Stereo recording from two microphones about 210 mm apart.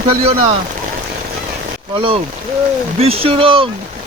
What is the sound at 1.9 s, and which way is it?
Speech, 25° right (ahead or behind).